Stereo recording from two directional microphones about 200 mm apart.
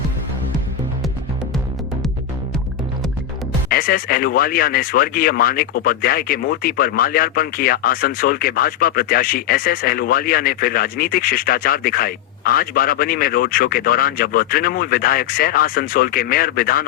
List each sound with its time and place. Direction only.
3.7 s speech: 45° left (ahead or behind)